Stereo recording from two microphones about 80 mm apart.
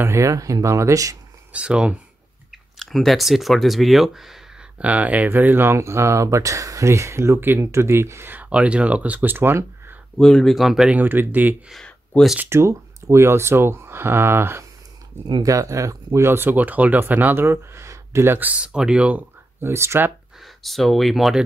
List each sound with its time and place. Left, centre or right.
0.0 s speech: right
1.5 s speech: centre
2.8 s speech: centre
4.7 s speech: centre
10.1 s speech: centre
11.0 s speech: right
12.1 s speech: centre
12.4 s speech: right
15.4 s speech: right; by 19.2 s centre
19.6 s speech: right
20.4 s speech: centre